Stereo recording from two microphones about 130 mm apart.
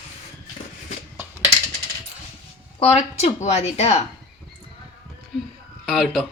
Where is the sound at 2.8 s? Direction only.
55° left (ahead or behind).